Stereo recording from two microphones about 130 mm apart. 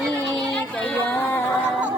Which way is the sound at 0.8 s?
10° left (ahead or behind).